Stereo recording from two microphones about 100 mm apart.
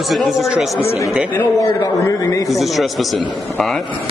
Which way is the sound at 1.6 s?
35° left (ahead or behind).